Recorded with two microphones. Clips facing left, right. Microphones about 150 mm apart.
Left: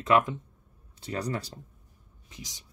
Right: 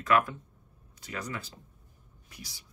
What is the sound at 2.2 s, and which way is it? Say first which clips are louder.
Speech: left 3 dB; 20° left (ahead or behind).